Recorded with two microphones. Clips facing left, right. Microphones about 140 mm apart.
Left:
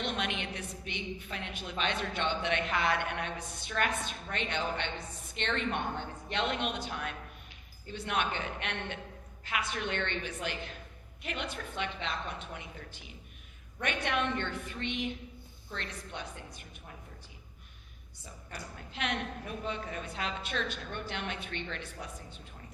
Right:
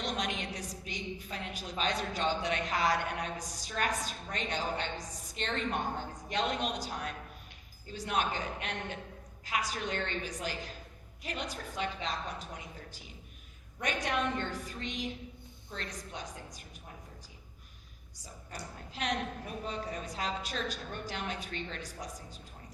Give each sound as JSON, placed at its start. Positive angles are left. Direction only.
{"t": 0.0, "sound": "a woman's voice", "side_deg": -40}
{"t": 18.2, "sound": "a woman's voice", "side_deg": -35}